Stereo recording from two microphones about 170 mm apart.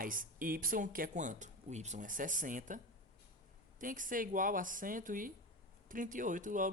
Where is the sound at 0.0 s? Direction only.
55° right (ahead or behind).